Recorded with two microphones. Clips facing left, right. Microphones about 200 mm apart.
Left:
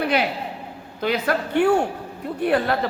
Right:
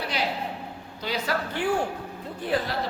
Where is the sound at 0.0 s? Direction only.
55° left (ahead or behind).